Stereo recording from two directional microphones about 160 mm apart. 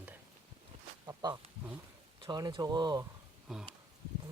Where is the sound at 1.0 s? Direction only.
25° right (ahead or behind).